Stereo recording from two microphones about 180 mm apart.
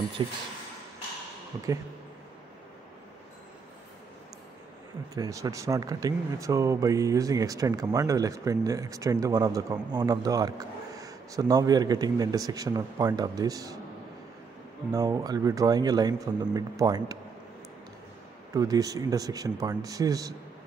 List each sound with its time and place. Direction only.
0.2 s speech: 25° right (ahead or behind)
5.1 s speech: 20° right (ahead or behind)
14.9 s speech: 20° right (ahead or behind)
18.5 s speech: 20° right (ahead or behind)